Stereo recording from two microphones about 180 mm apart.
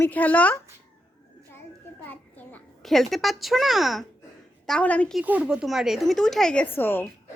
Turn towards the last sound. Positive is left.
turn(degrees=10)  # may be behind; listen again after turning